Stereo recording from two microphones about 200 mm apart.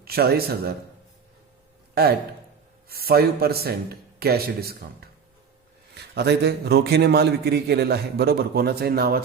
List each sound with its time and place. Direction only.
0.0 s speech: 50° right (ahead or behind)
2.9 s a man's voice: 50° right (ahead or behind)